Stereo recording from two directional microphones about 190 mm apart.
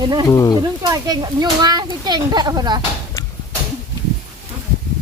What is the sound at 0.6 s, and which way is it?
A child's voice, 20° right (ahead or behind).